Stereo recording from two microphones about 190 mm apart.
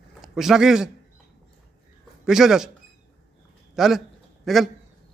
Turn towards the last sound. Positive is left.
turn(degrees=0)  # may be behind; listen again after turning